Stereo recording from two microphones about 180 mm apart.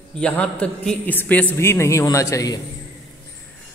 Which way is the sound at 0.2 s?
5° left (ahead or behind).